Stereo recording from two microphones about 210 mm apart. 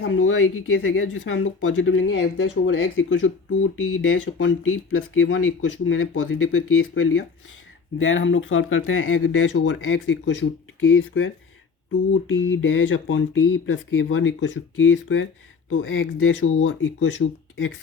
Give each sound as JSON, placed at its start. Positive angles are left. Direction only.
{"t": 0.0, "sound": "speech", "side_deg": 65}